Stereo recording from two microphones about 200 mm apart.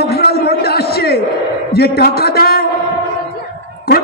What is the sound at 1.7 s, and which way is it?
Speech, 50° left (ahead or behind).